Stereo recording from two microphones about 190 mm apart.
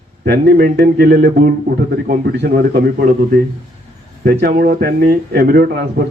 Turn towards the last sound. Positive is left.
turn(degrees=-55)  # may be behind; listen again after turning